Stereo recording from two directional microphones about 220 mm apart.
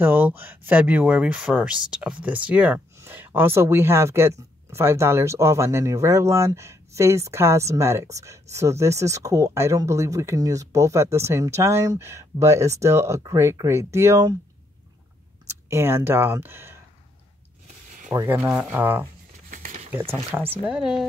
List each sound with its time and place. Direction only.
0.0 s speech: 10° right (ahead or behind)
15.4 s speech: 10° right (ahead or behind)
18.1 s speech: 10° right (ahead or behind)
19.5 s a sound: 35° right (ahead or behind)
19.9 s speech: 10° right (ahead or behind)